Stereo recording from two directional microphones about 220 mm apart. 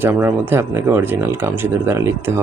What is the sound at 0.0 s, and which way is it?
A man's voice, 10° right (ahead or behind).